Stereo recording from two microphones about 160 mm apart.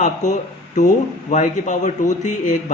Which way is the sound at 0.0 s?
50° left (ahead or behind).